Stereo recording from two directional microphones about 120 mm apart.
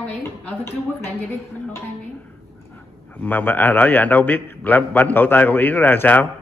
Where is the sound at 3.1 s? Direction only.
15° left (ahead or behind).